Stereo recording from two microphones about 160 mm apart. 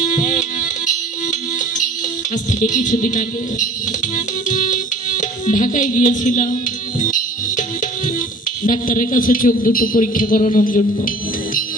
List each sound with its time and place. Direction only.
0.1 s music: 50° left (ahead or behind)
2.3 s speech: 50° left (ahead or behind)
4.1 s music: 55° left (ahead or behind)
8.6 s a man's voice: 55° left (ahead or behind)